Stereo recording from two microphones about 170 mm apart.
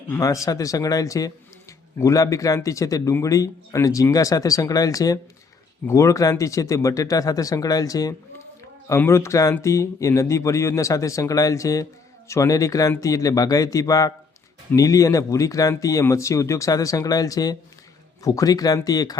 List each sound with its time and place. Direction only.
0.1 s speech: 20° left (ahead or behind)